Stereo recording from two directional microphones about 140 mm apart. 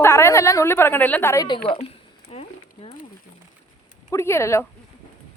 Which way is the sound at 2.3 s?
45° left (ahead or behind).